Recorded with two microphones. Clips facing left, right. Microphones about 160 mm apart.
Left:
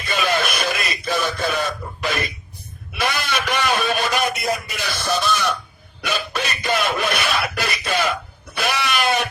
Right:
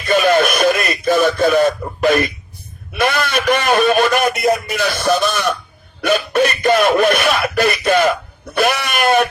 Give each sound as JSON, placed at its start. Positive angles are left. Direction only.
{"t": 0.0, "sound": "radio", "side_deg": -50}
{"t": 3.0, "sound": "a man's voice", "side_deg": -55}